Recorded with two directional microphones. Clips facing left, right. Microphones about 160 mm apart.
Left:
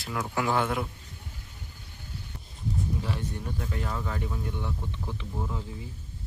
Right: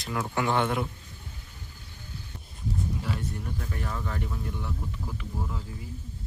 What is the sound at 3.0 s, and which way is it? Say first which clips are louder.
Speech: even; 15° left (ahead or behind).